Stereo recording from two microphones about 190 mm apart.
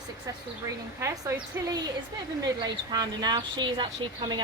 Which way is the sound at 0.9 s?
15° right (ahead or behind).